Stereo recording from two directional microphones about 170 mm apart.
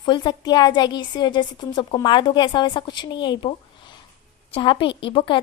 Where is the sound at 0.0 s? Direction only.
25° left (ahead or behind).